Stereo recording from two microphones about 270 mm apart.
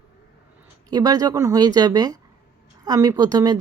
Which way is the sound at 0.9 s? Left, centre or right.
Centre.